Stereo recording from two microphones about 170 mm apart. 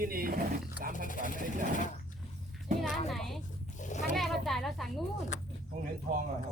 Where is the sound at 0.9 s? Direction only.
50° left (ahead or behind).